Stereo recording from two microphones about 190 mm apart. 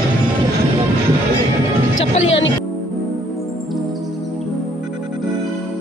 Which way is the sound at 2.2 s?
75° left (ahead or behind).